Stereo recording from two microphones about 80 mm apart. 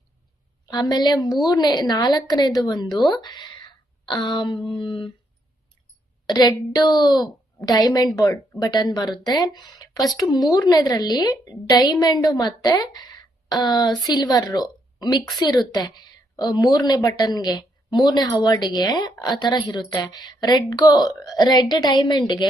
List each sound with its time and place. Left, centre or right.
0.6 s a woman's voice: left
4.8 s a sound: left
6.2 s a woman's voice: left